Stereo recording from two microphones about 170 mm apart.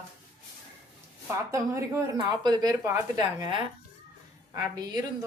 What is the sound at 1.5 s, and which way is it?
Speech, 15° right (ahead or behind).